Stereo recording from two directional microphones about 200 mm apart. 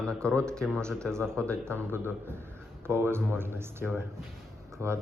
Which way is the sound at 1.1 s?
15° right (ahead or behind).